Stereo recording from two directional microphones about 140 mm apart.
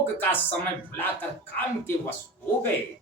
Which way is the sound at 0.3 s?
15° left (ahead or behind).